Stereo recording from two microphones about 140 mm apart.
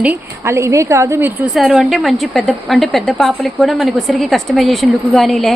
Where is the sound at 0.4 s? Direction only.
20° right (ahead or behind).